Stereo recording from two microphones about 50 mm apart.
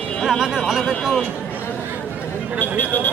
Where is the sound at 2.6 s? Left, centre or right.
Left.